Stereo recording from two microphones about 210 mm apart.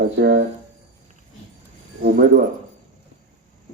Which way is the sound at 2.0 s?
50° right (ahead or behind).